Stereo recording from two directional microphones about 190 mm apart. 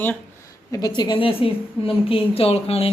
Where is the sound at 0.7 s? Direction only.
20° left (ahead or behind).